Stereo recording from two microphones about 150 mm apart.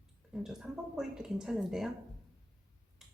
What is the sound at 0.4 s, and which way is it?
Speech, 5° right (ahead or behind).